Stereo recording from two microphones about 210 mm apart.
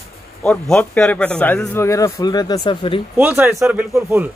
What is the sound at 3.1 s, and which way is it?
Speech, 10° right (ahead or behind).